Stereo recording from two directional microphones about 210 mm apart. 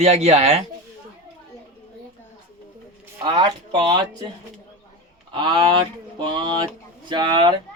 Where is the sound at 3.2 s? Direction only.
20° right (ahead or behind).